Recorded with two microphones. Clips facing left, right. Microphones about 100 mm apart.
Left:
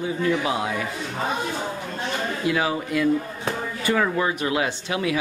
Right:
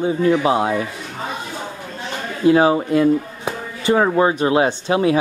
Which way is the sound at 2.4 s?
35° right (ahead or behind).